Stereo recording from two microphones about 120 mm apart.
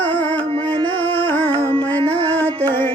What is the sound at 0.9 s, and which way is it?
Music, 15° left (ahead or behind).